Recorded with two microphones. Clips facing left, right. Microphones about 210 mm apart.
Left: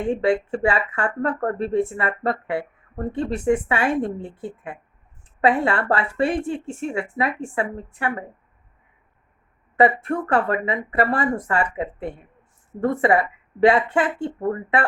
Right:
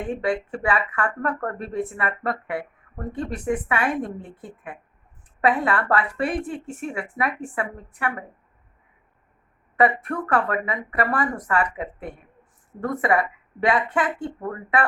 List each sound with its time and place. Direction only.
0.1 s speech: 25° left (ahead or behind)
9.7 s speech: 30° left (ahead or behind)